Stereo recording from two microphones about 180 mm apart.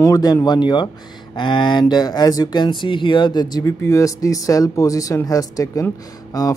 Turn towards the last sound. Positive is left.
turn(degrees=20)  # may be behind; listen again after turning